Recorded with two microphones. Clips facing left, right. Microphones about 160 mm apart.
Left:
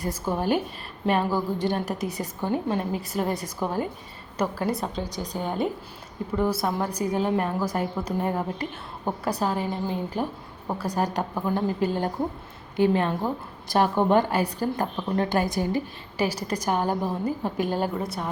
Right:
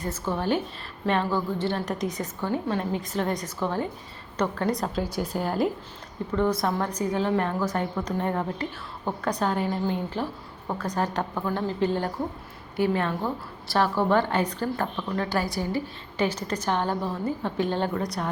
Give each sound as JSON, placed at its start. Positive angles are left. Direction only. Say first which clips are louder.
{"t": 0.0, "sound": "a woman's voice", "louder": "left 1 dB", "side_deg": 10}
{"t": 6.3, "sound": "a woman's voice", "louder": "right 1 dB", "side_deg": 10}